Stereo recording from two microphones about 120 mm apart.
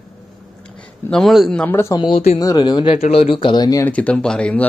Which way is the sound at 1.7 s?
20° left (ahead or behind).